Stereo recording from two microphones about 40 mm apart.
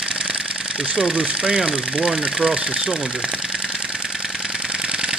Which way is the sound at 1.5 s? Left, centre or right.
Right.